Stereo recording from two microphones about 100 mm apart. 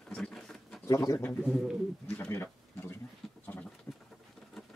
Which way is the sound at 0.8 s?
35° left (ahead or behind).